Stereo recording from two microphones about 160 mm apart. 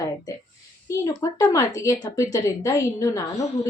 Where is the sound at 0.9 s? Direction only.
20° left (ahead or behind).